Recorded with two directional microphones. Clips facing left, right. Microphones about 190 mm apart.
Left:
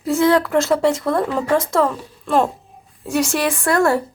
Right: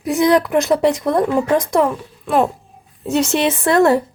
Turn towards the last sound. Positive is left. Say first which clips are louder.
# right 3 dB
turn(degrees=-20)  # may be behind; listen again after turning